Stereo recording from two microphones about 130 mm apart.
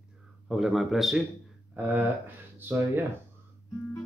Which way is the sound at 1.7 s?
15° right (ahead or behind).